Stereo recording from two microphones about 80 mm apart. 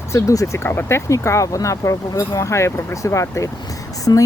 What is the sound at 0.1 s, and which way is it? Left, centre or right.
Speech, left.